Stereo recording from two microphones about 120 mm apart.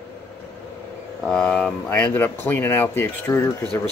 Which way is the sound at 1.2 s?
5° left (ahead or behind).